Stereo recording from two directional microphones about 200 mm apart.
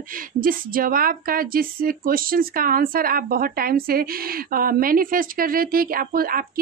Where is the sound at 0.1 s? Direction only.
45° right (ahead or behind).